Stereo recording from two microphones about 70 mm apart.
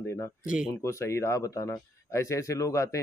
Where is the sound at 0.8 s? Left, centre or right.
Left.